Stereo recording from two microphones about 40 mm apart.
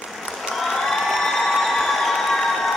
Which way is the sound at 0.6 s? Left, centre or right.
Centre.